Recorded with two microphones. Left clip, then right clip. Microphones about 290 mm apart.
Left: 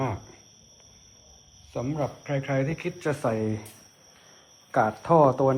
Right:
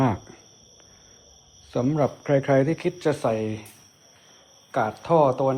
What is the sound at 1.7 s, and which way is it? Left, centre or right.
Speech, right.